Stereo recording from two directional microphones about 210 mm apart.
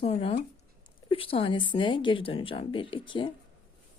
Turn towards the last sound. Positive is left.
turn(degrees=25)  # may be behind; listen again after turning